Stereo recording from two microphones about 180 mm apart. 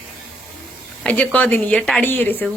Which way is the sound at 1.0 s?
10° left (ahead or behind).